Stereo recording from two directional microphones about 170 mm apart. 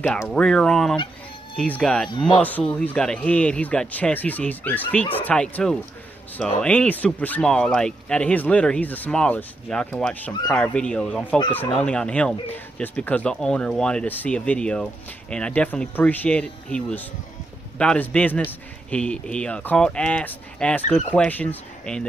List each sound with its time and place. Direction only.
0.3 s speech: 5° left (ahead or behind)
2.0 s speech: 30° left (ahead or behind)
2.3 s speech: 10° left (ahead or behind)